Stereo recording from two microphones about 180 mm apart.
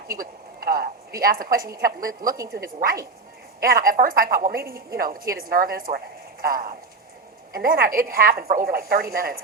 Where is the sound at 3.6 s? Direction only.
55° right (ahead or behind).